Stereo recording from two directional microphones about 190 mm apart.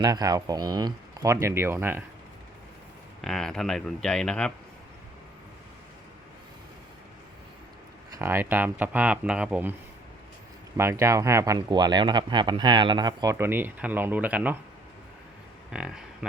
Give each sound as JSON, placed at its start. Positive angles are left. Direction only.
{"t": 0.0, "sound": "speech", "side_deg": -20}
{"t": 3.2, "sound": "speech", "side_deg": 0}
{"t": 8.1, "sound": "speech", "side_deg": -15}
{"t": 10.8, "sound": "speech", "side_deg": -15}
{"t": 15.7, "sound": "speech", "side_deg": -5}